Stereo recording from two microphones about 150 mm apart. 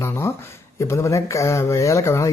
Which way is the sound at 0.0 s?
15° left (ahead or behind).